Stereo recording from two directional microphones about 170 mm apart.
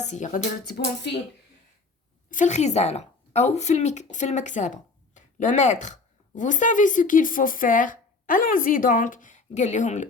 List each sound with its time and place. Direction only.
0.0 s music: 45° left (ahead or behind)
2.3 s speech: 45° left (ahead or behind)